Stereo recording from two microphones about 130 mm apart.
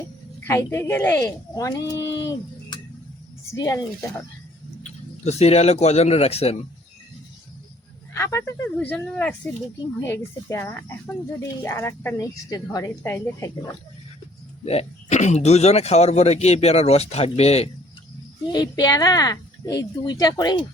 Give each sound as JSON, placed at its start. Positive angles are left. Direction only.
{"t": 0.4, "sound": "speech", "side_deg": 20}
{"t": 3.5, "sound": "speech", "side_deg": 25}
{"t": 4.8, "sound": "speech", "side_deg": 55}
{"t": 8.1, "sound": "speech", "side_deg": 20}
{"t": 13.0, "sound": "speech", "side_deg": 20}
{"t": 14.6, "sound": "speech", "side_deg": 50}
{"t": 18.5, "sound": "speech", "side_deg": 30}